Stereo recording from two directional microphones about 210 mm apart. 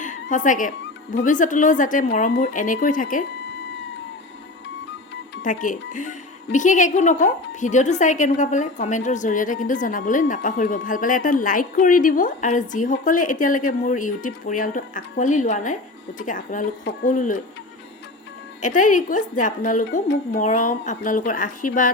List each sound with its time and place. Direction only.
0.0 s dog: 35° left (ahead or behind)
1.1 s a woman's voice: 40° left (ahead or behind)
5.4 s a woman's voice: 40° left (ahead or behind)
18.6 s a woman's voice: 35° left (ahead or behind)